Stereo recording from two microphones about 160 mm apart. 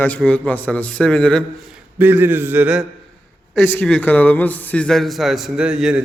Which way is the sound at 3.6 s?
10° left (ahead or behind).